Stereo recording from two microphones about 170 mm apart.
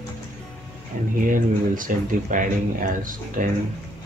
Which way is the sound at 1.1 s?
50° right (ahead or behind).